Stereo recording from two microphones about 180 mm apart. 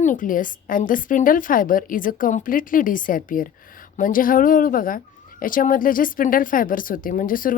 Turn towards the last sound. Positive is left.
turn(degrees=50)  # may be behind; listen again after turning